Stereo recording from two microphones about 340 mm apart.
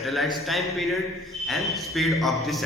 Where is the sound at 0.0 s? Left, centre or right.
Centre.